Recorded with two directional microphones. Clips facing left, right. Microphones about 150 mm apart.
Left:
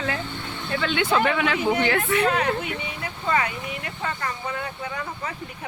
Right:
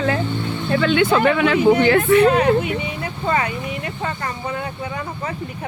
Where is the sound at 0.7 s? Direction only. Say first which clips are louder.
Right 6 dB; 55° right (ahead or behind); by 2.5 s 30° right (ahead or behind).